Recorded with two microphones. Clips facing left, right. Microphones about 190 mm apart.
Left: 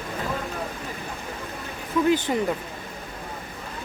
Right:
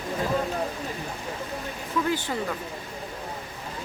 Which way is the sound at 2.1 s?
20° left (ahead or behind).